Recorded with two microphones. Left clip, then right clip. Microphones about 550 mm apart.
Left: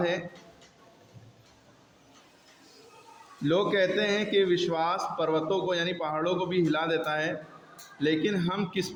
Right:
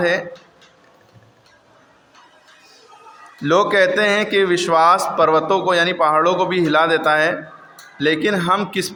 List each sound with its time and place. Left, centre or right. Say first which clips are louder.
3.4 s a man's voice: right 11 dB; left